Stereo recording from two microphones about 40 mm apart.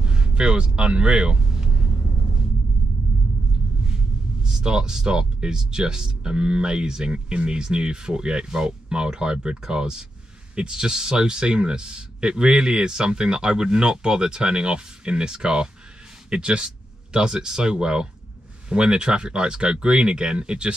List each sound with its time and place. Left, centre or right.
0.0 s vehicle: right
3.8 s a sound: centre
5.4 s speech: centre